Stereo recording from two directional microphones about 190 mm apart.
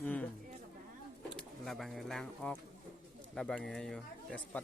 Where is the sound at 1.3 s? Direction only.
Centre (ahead or behind).